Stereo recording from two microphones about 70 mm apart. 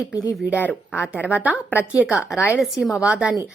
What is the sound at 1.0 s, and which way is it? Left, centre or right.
A woman's voice, centre.